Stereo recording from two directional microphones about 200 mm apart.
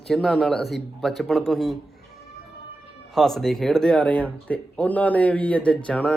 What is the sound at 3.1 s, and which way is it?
Speech, centre (ahead or behind).